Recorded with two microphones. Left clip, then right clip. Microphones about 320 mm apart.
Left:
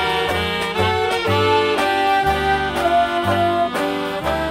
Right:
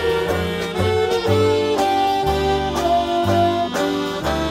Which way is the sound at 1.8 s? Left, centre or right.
Left.